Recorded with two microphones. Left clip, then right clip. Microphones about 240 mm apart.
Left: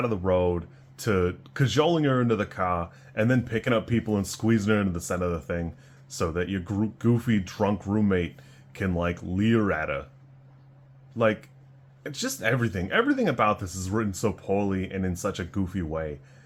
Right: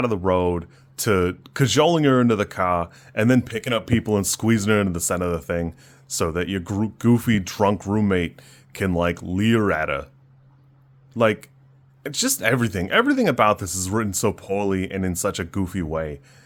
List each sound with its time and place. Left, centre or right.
0.0 s speech: right
11.2 s speech: right